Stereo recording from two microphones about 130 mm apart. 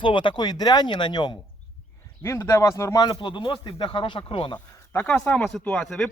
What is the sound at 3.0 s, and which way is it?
Speech, 35° left (ahead or behind).